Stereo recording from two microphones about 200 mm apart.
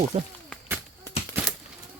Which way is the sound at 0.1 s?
35° right (ahead or behind).